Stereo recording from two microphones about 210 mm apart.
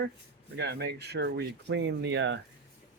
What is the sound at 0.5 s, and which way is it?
Speech, 50° right (ahead or behind).